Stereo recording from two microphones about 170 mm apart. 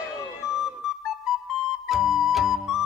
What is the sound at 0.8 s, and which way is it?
Music, centre (ahead or behind).